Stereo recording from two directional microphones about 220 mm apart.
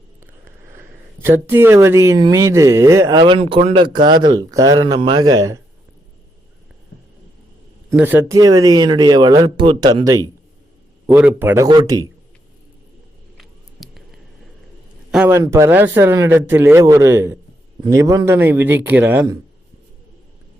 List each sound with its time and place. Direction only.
0.4 s speech: 10° right (ahead or behind)
7.9 s speech: 10° right (ahead or behind)
13.3 s a sound: centre (ahead or behind)
15.1 s speech: 10° right (ahead or behind)